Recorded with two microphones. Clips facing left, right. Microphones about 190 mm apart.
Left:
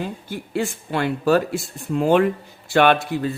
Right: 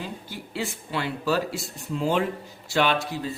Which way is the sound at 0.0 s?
50° left (ahead or behind).